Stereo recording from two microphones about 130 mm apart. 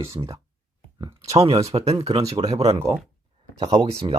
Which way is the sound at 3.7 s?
30° right (ahead or behind).